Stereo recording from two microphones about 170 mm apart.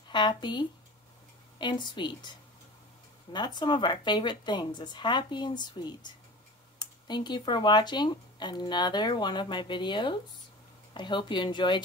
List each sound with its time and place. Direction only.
0.1 s speech: 25° left (ahead or behind)
3.3 s speech: 25° left (ahead or behind)